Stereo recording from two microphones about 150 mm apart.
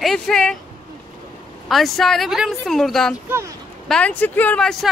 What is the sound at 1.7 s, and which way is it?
A woman's voice, centre (ahead or behind).